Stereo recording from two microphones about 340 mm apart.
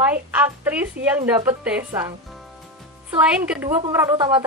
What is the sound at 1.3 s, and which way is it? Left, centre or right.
Speech, centre.